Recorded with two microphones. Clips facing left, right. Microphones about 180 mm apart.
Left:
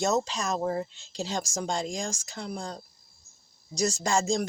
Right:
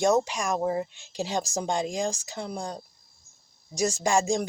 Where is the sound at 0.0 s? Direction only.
10° right (ahead or behind).